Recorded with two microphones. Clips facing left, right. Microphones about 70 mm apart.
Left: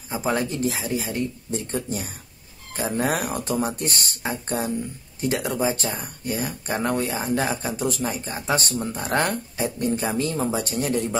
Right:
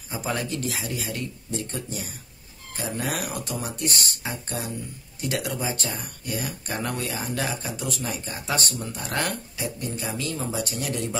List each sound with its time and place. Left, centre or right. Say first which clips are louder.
0.1 s speech: left 4 dB; left
2.8 s speech: left 5 dB; left